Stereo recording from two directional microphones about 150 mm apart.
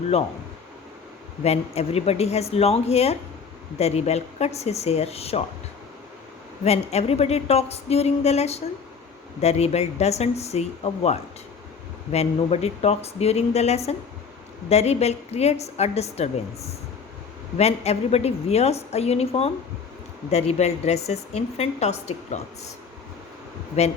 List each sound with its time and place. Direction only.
1.5 s a woman's voice: 45° left (ahead or behind)
6.7 s a woman's voice: 45° left (ahead or behind)
23.8 s a woman's voice: 45° left (ahead or behind)